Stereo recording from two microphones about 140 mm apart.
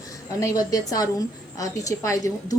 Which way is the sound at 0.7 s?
25° left (ahead or behind).